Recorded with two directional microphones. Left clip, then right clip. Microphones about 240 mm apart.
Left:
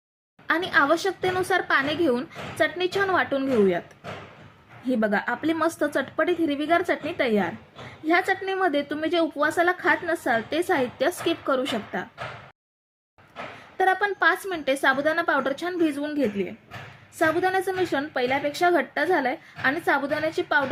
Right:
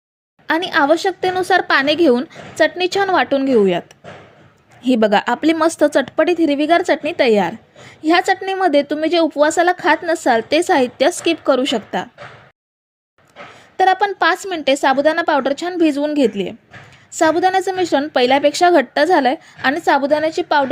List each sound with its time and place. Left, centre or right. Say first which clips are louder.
0.4 s a woman's voice: right 6 dB; right
13.7 s a woman's voice: right 8 dB; right